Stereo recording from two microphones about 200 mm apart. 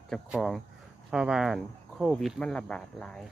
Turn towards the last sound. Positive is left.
turn(degrees=5)  # may be behind; listen again after turning